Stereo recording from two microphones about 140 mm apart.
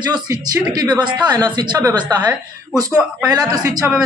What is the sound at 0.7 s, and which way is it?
Speech, 30° right (ahead or behind).